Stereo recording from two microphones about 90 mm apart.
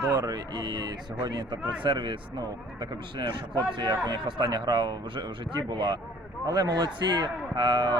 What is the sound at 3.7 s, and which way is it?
A man's voice, 45° right (ahead or behind).